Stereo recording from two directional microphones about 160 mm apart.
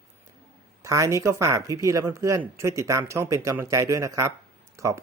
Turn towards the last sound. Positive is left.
turn(degrees=-20)  # may be behind; listen again after turning